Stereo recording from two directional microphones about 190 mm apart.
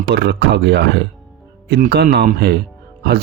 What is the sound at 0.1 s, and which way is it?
Speech, 60° right (ahead or behind).